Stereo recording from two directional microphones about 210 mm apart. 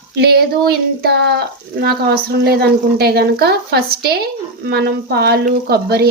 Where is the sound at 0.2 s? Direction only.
50° right (ahead or behind).